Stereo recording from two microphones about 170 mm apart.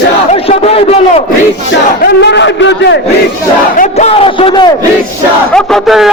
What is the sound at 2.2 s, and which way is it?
Speech, 90° left.